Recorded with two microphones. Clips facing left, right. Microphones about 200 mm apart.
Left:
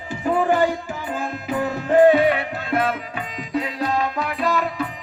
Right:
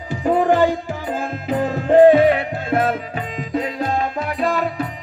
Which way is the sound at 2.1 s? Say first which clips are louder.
Right 4 dB; 50° right (ahead or behind).